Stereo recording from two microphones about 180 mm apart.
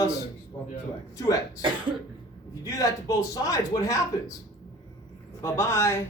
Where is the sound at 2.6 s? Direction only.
20° left (ahead or behind).